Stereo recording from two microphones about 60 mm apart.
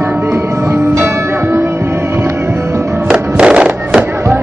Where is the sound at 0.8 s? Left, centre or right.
Right.